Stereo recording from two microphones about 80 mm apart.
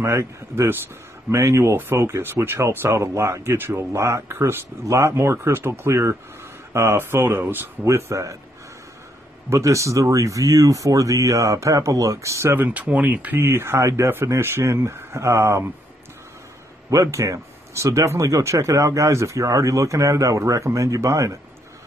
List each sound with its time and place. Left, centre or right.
0.0 s speech: right
9.5 s speech: right
12.5 s speech: centre; by 15.7 s right
16.9 s speech: right